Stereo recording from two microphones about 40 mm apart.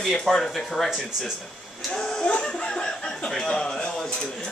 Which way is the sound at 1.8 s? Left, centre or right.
Centre.